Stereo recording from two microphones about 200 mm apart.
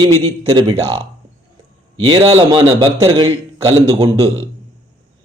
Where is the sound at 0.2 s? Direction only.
30° right (ahead or behind).